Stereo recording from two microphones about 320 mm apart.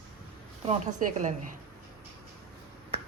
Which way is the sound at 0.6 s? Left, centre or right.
Right.